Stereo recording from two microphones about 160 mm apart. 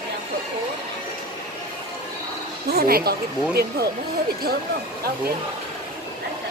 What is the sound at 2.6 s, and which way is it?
Speech, 70° right (ahead or behind).